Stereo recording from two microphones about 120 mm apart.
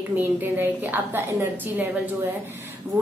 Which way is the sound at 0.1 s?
15° right (ahead or behind).